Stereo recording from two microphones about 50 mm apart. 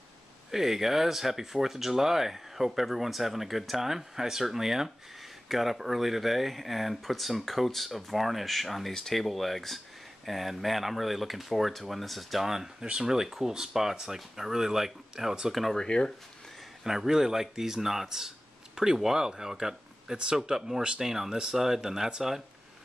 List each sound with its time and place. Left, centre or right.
0.5 s speech: centre
15.7 s speech: centre
16.8 s speech: centre